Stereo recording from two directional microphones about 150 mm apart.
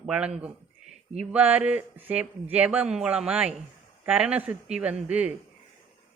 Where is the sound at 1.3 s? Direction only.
10° right (ahead or behind).